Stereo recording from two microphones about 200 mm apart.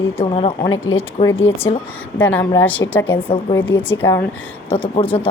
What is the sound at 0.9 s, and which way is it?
Speech, 90° left.